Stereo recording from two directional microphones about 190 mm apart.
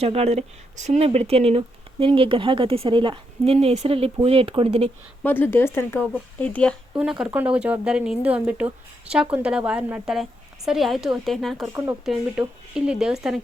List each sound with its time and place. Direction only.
0.0 s speech: 35° right (ahead or behind)
5.2 s speech: 10° left (ahead or behind)